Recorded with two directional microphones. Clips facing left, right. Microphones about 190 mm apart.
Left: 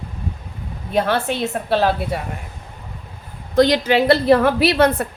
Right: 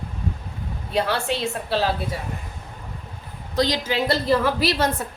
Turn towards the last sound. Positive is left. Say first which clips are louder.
# left 7 dB
turn(degrees=60)  # may be behind; listen again after turning